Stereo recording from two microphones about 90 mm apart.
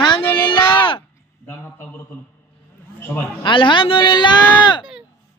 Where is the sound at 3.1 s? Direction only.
20° left (ahead or behind).